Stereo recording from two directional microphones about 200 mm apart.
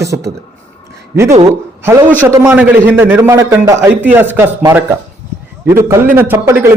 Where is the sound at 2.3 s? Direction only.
15° right (ahead or behind).